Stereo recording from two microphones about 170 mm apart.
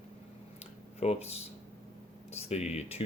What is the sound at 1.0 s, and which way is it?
Speech, 35° left (ahead or behind).